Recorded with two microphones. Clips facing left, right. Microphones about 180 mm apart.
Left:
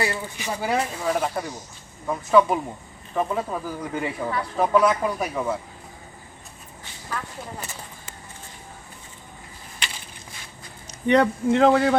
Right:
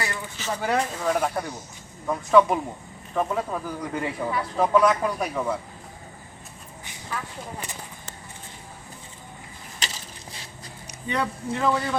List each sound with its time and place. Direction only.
0.0 s speech: 15° left (ahead or behind)
7.1 s speech: 5° right (ahead or behind)
9.8 s crushing: 35° right (ahead or behind)
11.1 s speech: 70° left (ahead or behind)